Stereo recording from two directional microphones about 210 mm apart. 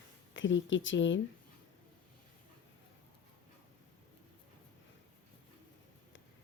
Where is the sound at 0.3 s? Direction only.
60° left (ahead or behind).